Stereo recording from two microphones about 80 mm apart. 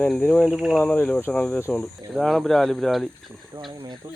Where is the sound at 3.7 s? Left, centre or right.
Right.